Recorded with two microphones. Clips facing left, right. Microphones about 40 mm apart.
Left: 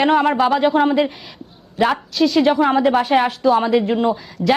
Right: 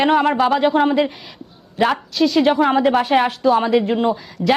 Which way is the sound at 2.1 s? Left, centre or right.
Right.